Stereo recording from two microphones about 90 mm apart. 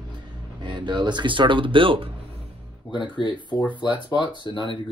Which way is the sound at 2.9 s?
60° left (ahead or behind).